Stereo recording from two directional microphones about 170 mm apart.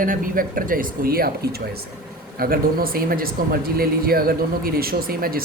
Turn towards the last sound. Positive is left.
turn(degrees=-60)  # may be behind; listen again after turning